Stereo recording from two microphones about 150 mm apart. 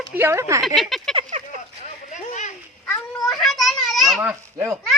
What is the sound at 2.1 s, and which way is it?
Children playing, 55° left (ahead or behind).